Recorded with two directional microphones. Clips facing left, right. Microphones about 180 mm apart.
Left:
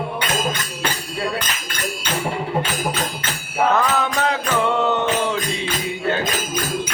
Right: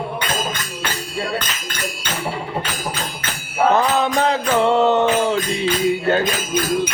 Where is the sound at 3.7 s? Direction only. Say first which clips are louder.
Right 4 dB; 30° right (ahead or behind).